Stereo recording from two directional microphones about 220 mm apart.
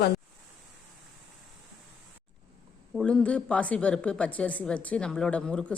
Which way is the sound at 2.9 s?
5° left (ahead or behind).